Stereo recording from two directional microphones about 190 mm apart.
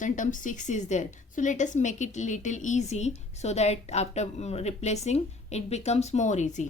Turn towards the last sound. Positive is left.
turn(degrees=40)  # may be behind; listen again after turning